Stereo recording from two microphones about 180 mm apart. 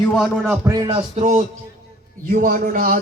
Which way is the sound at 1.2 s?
40° right (ahead or behind).